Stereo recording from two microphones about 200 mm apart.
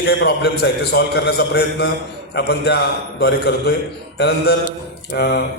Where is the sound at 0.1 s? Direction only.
55° left (ahead or behind).